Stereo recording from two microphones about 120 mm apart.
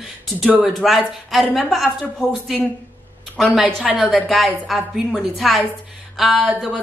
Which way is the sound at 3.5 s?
5° right (ahead or behind).